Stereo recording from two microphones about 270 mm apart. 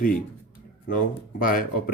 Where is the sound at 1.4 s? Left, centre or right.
Left.